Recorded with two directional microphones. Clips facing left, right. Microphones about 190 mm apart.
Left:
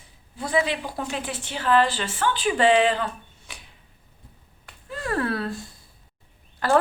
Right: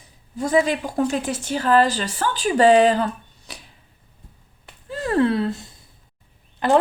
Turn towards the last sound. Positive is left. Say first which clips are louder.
# right 3 dB
turn(degrees=-20)  # may be behind; listen again after turning